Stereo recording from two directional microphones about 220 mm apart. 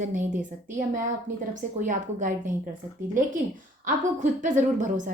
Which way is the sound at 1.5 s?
35° right (ahead or behind).